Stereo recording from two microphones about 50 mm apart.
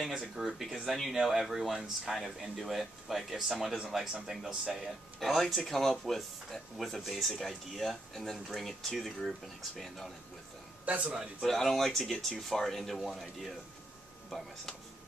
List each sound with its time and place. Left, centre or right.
0.4 s speech: centre
10.9 s speech: right
11.4 s speech: centre